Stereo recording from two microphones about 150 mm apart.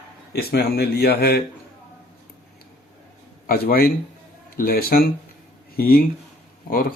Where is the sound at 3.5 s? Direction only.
85° left.